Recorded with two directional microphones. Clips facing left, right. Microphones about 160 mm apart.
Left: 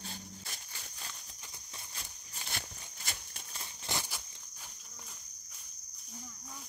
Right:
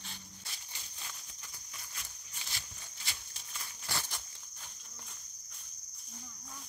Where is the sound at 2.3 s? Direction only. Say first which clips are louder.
Left 6 dB; 50° left (ahead or behind).